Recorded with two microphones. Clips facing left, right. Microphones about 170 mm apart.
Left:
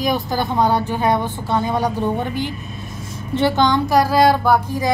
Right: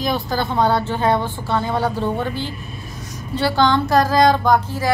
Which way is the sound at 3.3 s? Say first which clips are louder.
Left 1 dB; 20° left (ahead or behind).